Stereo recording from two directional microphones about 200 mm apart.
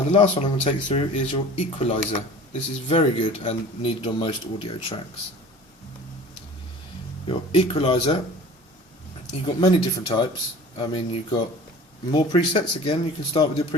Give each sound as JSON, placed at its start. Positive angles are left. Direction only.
{"t": 0.1, "sound": "speech", "side_deg": 30}
{"t": 7.3, "sound": "speech", "side_deg": 25}
{"t": 9.3, "sound": "speech", "side_deg": 20}